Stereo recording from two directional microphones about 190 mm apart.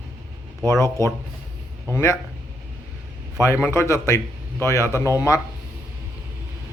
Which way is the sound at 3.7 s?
15° left (ahead or behind).